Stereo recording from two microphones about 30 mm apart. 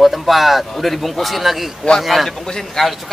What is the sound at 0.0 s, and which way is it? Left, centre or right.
Speech, centre.